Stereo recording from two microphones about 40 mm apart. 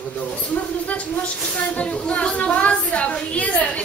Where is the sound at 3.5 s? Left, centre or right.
Left.